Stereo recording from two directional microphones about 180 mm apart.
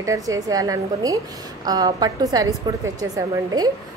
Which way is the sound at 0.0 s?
20° right (ahead or behind).